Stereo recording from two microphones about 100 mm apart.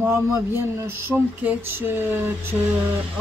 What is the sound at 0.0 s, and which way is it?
Speech, 25° right (ahead or behind).